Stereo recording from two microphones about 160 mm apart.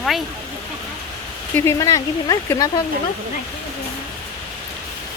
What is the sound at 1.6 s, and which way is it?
Speech, 20° left (ahead or behind).